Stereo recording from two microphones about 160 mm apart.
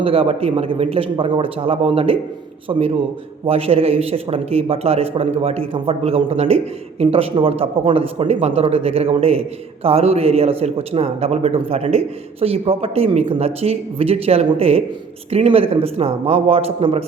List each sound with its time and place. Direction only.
0.0 s a man's voice: 35° right (ahead or behind)